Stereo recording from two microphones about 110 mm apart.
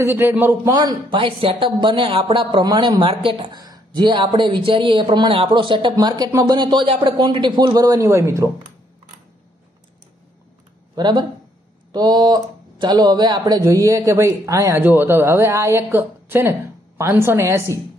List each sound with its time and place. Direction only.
0.0 s speech: 20° right (ahead or behind)
0.7 s speech: 40° right (ahead or behind)
11.0 s speech: 45° right (ahead or behind); by 14.8 s 30° right (ahead or behind)
14.8 s speech: 20° right (ahead or behind)